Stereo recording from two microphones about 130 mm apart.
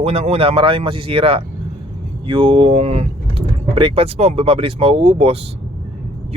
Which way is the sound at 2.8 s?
50° right (ahead or behind).